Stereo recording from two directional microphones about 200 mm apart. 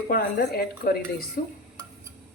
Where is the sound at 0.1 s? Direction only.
50° left (ahead or behind).